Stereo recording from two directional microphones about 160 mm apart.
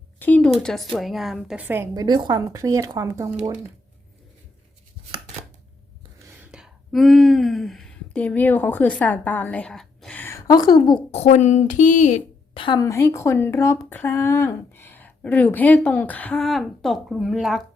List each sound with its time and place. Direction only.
0.2 s a woman's voice: 10° left (ahead or behind); by 1.9 s 10° right (ahead or behind)
1.9 s speech: 25° right (ahead or behind)
6.3 s speech: 10° right (ahead or behind); by 11.0 s 30° left (ahead or behind)
11.1 s speech: 45° left (ahead or behind)
12.5 s speech: 25° left (ahead or behind); by 17.6 s centre (ahead or behind)